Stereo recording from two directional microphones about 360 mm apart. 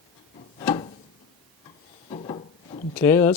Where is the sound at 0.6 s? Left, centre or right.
Centre.